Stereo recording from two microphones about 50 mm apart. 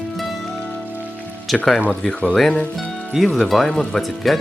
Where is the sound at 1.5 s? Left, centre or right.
Centre.